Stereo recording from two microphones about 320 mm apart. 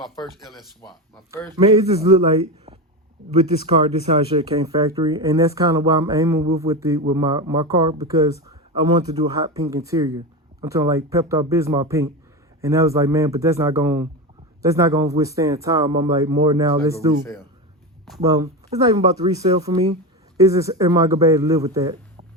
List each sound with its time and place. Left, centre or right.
1.5 s a man's voice: centre
18.2 s speech: centre